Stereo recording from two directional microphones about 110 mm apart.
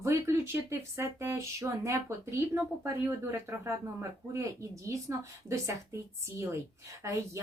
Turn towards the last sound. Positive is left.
turn(degrees=-25)  # may be behind; listen again after turning